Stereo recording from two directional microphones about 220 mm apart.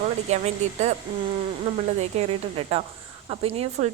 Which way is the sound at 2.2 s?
30° right (ahead or behind).